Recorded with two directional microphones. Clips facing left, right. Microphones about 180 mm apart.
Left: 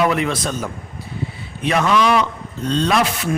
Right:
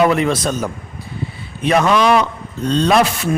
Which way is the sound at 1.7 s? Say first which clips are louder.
Right 3 dB; 40° right (ahead or behind).